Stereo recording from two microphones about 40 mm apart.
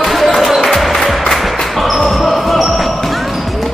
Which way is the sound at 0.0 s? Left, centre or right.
Centre.